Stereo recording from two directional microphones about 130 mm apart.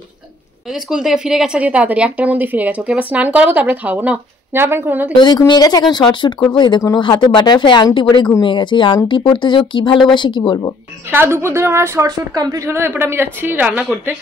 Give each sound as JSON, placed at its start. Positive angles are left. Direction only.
{"t": 0.8, "sound": "a woman's voice", "side_deg": -5}
{"t": 5.1, "sound": "speech", "side_deg": 35}
{"t": 11.1, "sound": "a woman's voice", "side_deg": -20}